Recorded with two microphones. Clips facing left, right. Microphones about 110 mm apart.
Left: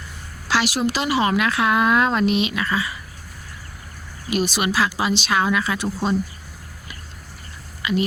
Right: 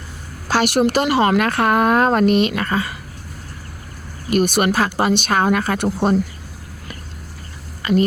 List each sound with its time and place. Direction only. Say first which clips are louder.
0.4 s a woman's voice: right 5 dB; 50° right (ahead or behind)
4.3 s a woman's voice: right 5 dB; 50° right (ahead or behind)
7.8 s a sound: right 5 dB; 45° right (ahead or behind)